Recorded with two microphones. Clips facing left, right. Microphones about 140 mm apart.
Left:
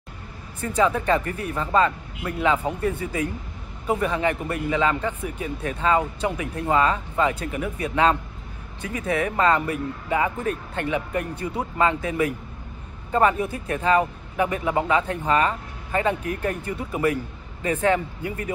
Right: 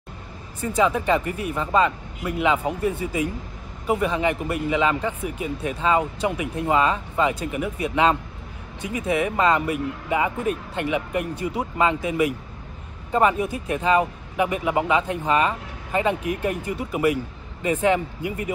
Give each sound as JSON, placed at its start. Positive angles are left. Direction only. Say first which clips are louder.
{"t": 0.7, "sound": "speech", "louder": "right 1 dB", "side_deg": -10}